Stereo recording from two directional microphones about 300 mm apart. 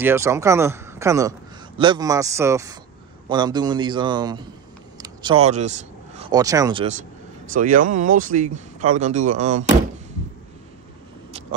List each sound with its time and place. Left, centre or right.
0.0 s speech: centre